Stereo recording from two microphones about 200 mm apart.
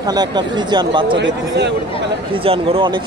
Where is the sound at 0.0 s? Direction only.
20° right (ahead or behind).